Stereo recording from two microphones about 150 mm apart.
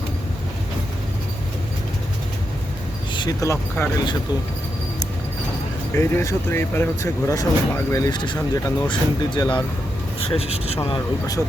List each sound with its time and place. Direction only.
3.1 s speech: 30° left (ahead or behind)
6.0 s speech: 15° left (ahead or behind)
10.2 s speech: 40° left (ahead or behind)